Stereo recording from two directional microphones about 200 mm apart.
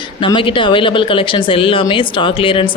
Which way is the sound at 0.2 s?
25° left (ahead or behind).